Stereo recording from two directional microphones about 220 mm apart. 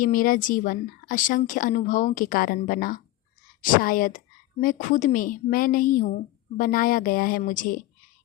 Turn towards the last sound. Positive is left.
turn(degrees=40)  # may be behind; listen again after turning